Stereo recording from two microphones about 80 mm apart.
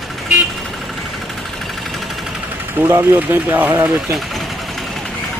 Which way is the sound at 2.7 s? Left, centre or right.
Right.